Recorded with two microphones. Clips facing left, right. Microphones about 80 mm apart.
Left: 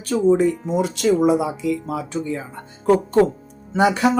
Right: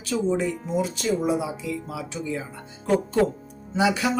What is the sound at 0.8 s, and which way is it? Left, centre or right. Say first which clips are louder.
Speech: left 7 dB; left.